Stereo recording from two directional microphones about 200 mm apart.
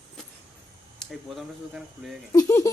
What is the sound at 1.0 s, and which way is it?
Speech, centre (ahead or behind).